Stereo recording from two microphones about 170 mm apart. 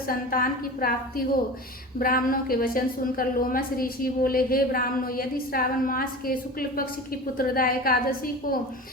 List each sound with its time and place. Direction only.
0.1 s a woman's voice: 55° left (ahead or behind)